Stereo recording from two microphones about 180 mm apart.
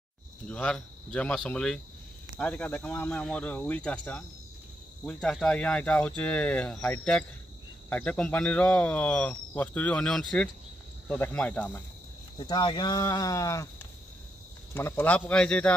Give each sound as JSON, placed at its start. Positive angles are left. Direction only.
{"t": 0.5, "sound": "speech", "side_deg": 5}
{"t": 12.4, "sound": "speech", "side_deg": 25}
{"t": 14.7, "sound": "speech", "side_deg": 10}